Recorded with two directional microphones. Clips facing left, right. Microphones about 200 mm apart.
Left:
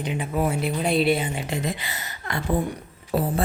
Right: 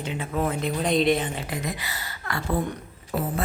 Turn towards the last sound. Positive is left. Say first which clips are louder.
# left 4 dB
turn(degrees=35)  # may be behind; listen again after turning